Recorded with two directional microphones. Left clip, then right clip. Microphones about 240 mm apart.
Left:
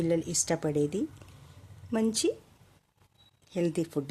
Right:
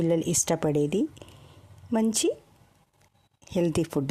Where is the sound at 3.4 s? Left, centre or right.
Right.